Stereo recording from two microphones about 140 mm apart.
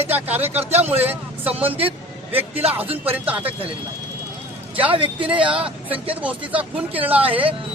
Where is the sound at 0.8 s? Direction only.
45° right (ahead or behind).